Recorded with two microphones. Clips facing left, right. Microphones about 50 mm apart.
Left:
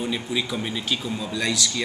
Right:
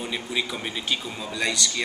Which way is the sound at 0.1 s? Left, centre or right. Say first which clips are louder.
Left 2 dB; centre.